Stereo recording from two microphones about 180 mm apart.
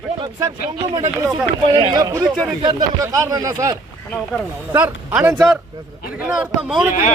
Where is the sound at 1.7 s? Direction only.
25° right (ahead or behind).